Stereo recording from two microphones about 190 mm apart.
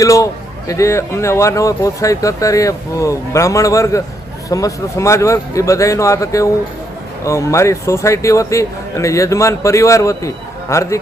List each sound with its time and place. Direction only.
0.0 s a man's voice: 15° left (ahead or behind)